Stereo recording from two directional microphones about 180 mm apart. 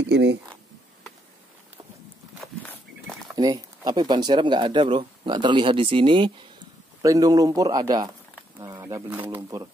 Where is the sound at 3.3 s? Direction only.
20° right (ahead or behind).